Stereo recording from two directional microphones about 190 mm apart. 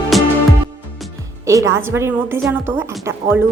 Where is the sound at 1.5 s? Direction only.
15° right (ahead or behind).